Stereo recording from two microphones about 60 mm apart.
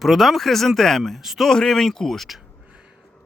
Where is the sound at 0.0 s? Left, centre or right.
Centre.